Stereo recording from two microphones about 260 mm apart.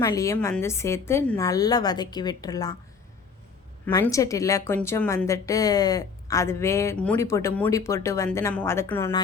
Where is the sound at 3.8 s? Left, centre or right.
Centre.